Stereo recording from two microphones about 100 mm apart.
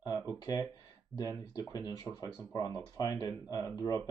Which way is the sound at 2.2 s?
35° left (ahead or behind).